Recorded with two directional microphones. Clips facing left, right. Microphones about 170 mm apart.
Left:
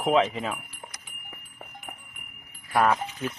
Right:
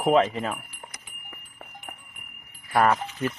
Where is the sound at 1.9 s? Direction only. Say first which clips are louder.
Even; centre (ahead or behind).